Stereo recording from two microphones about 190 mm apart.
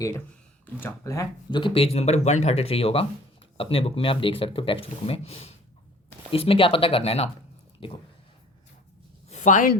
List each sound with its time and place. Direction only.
0.6 s speech: 10° left (ahead or behind); by 7.9 s 30° left (ahead or behind)
9.3 s speech: 40° left (ahead or behind)